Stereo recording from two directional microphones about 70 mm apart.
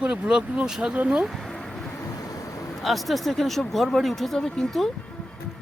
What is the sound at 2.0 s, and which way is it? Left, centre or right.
Vehicle, left.